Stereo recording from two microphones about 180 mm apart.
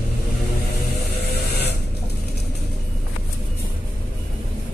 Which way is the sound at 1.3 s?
60° left (ahead or behind).